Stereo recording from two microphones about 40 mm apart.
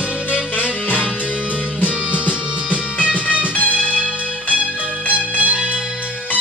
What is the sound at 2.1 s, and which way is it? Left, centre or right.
Music, right.